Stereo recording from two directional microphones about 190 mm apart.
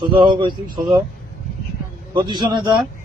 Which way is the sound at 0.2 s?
25° right (ahead or behind).